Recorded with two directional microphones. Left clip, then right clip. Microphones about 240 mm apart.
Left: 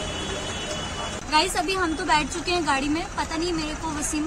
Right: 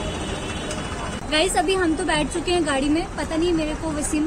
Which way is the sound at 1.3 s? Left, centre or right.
Centre.